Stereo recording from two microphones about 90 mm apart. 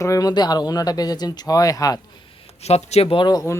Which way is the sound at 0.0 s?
40° left (ahead or behind).